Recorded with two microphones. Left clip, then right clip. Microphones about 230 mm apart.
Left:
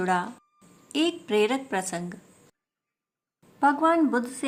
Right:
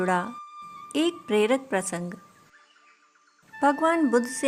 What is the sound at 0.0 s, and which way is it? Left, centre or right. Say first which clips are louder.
A woman's voice: even; right.